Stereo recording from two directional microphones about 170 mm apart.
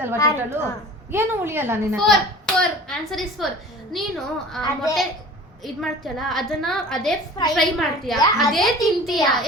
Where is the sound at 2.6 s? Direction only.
Centre (ahead or behind).